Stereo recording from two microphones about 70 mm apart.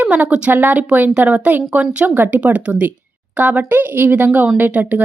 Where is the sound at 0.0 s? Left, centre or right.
Centre.